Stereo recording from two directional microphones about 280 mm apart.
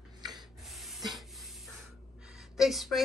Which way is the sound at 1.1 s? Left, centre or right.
Centre.